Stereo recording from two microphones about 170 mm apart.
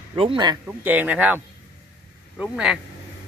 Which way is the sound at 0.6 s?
10° right (ahead or behind).